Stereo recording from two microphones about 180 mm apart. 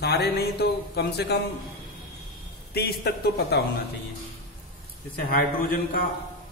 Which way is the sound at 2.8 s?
60° left (ahead or behind).